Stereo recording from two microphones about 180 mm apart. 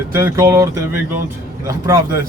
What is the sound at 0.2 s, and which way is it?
A man's voice, 15° right (ahead or behind).